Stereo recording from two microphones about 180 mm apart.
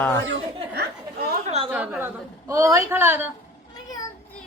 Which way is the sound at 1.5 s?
35° right (ahead or behind).